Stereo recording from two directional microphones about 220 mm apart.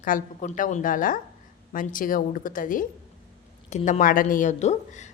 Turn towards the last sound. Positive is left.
turn(degrees=30)  # may be behind; listen again after turning